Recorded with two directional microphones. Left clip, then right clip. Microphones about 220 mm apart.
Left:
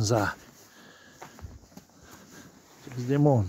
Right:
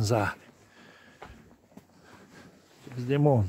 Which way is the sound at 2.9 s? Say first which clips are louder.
Left 1 dB; 5° right (ahead or behind).